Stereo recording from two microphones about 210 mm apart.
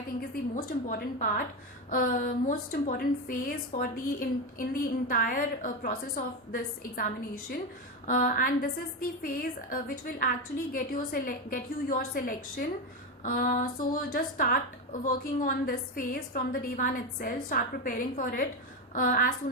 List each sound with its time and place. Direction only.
0.2 s a woman's voice: 45° left (ahead or behind)